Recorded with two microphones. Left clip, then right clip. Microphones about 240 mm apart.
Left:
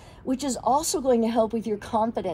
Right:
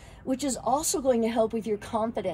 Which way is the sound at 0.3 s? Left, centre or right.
Centre.